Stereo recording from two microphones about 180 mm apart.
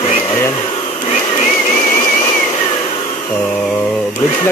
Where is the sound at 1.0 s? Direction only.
40° left (ahead or behind).